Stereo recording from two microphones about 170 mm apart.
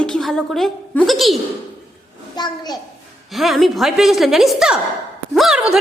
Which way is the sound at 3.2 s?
Centre (ahead or behind).